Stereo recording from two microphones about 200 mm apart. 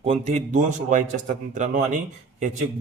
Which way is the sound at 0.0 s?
30° right (ahead or behind).